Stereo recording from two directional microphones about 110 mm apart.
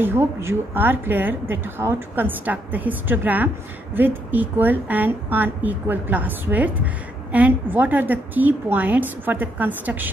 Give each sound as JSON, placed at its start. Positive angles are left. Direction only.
{"t": 0.0, "sound": "a woman's voice", "side_deg": -20}